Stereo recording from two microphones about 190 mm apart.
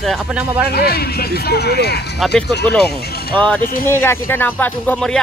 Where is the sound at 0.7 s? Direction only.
55° left (ahead or behind).